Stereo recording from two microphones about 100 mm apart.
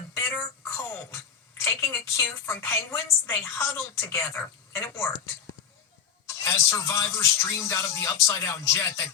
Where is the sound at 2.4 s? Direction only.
25° left (ahead or behind).